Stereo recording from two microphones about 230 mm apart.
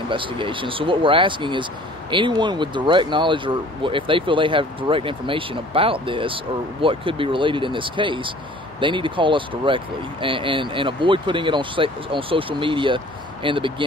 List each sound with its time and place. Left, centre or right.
0.1 s speech: right